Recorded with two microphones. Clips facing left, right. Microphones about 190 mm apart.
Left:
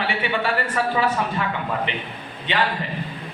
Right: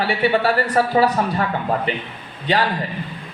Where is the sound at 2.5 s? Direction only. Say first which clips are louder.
Right 4 dB; 40° right (ahead or behind).